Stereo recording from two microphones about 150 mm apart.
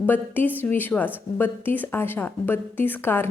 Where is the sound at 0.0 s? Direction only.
10° left (ahead or behind).